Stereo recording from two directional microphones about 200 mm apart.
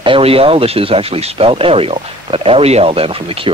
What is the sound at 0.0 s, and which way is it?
Speech, 25° right (ahead or behind).